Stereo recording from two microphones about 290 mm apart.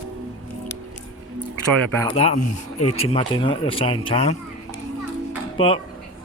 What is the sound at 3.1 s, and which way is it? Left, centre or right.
Speech, centre.